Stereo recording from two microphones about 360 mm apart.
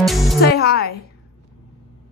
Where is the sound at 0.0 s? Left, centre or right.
Centre.